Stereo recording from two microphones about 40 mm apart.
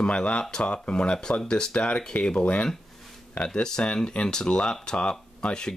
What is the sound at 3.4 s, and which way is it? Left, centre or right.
Speech, centre.